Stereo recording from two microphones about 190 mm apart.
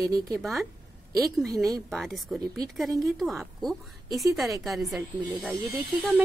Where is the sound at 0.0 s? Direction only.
15° right (ahead or behind).